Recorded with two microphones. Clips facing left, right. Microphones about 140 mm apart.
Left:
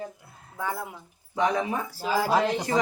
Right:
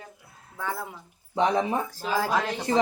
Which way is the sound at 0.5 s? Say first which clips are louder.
Left 1 dB; 10° left (ahead or behind).